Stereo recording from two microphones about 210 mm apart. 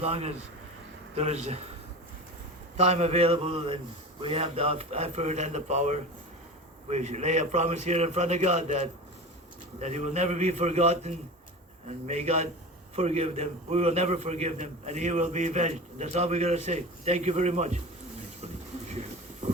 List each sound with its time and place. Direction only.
0.0 s a man's voice: 30° right (ahead or behind)
2.7 s a sound: 30° right (ahead or behind)
4.2 s a man's voice: 30° right (ahead or behind)